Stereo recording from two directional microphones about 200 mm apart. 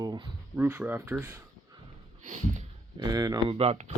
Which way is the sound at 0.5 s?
5° right (ahead or behind).